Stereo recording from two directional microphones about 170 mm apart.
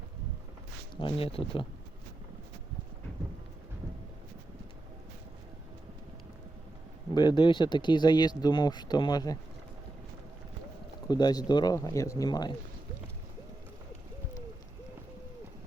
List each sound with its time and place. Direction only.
0.9 s speech: 30° left (ahead or behind)
7.1 s speech: 25° left (ahead or behind)
11.1 s speech: 25° left (ahead or behind)